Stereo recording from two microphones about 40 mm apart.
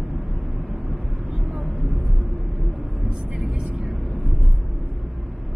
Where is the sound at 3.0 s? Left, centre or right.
Right.